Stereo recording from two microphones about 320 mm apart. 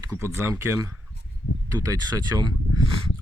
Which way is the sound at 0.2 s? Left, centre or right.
Centre.